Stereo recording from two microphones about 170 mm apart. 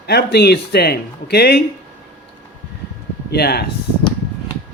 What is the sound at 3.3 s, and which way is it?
Speech, 70° left (ahead or behind).